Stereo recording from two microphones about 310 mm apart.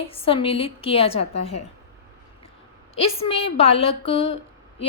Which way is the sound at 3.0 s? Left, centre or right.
Centre.